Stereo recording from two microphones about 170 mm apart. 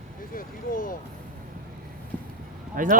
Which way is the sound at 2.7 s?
50° right (ahead or behind).